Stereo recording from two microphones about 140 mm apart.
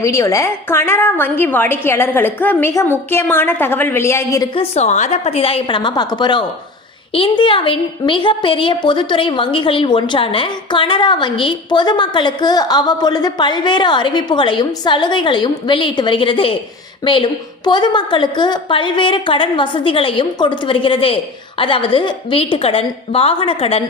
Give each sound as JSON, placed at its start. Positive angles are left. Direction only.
{"t": 0.0, "sound": "a woman's voice", "side_deg": 20}
{"t": 4.5, "sound": "a woman's voice", "side_deg": 50}